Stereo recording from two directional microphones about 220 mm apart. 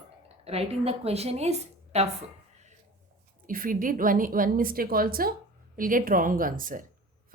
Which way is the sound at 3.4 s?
40° right (ahead or behind).